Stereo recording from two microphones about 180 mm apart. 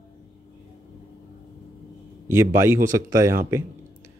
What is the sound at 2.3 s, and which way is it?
Speech, 15° right (ahead or behind).